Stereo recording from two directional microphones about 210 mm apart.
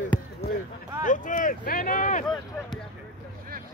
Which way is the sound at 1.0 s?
40° left (ahead or behind).